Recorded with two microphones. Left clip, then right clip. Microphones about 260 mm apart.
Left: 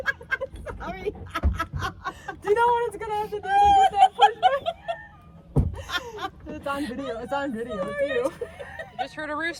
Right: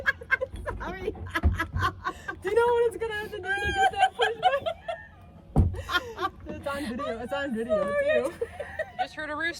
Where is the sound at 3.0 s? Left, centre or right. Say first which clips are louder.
Left 4 dB; centre.